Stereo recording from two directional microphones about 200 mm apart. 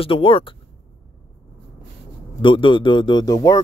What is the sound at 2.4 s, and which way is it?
Speech, 25° left (ahead or behind).